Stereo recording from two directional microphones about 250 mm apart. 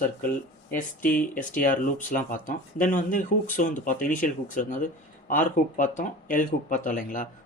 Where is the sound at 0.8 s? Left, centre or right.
Left.